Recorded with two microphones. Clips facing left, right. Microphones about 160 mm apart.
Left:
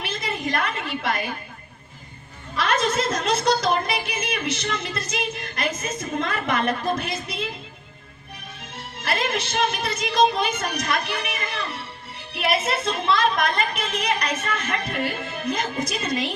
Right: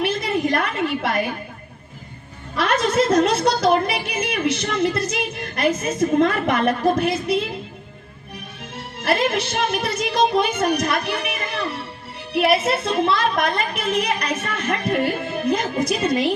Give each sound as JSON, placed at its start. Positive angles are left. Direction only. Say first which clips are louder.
{"t": 0.0, "sound": "a sound", "louder": "right 8 dB", "side_deg": -60}
{"t": 2.6, "sound": "a woman's voice", "louder": "right 4 dB", "side_deg": -60}
{"t": 9.0, "sound": "a woman's voice", "louder": "right 6 dB", "side_deg": -60}